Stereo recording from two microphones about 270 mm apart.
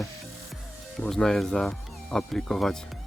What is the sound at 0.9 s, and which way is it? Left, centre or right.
Speech, centre.